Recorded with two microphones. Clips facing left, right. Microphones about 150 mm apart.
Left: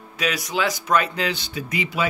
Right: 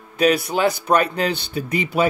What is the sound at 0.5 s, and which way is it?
Speech, 45° right (ahead or behind).